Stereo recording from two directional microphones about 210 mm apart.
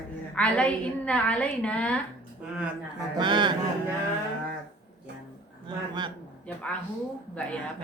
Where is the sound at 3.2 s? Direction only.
20° right (ahead or behind).